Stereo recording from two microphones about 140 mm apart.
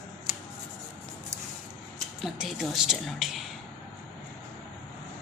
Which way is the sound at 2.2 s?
Centre (ahead or behind).